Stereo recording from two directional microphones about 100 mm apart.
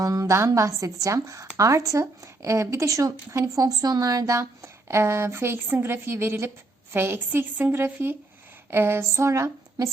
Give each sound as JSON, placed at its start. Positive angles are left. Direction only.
{"t": 0.0, "sound": "a woman's voice", "side_deg": -35}